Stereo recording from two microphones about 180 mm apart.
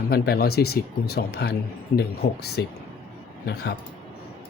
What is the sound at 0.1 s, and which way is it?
Speech, 60° left (ahead or behind).